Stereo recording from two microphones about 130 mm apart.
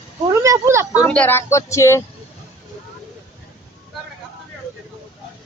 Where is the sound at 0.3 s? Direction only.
25° right (ahead or behind).